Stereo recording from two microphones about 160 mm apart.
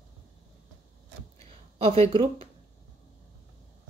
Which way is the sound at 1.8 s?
35° right (ahead or behind).